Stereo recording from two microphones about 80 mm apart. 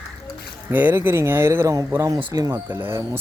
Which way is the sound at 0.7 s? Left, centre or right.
Right.